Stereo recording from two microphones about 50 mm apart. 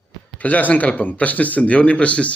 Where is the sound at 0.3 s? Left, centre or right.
Left.